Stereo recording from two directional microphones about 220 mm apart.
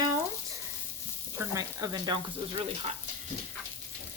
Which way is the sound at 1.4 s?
15° right (ahead or behind).